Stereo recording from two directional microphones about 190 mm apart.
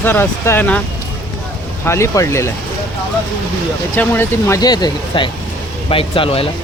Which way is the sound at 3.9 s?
10° left (ahead or behind).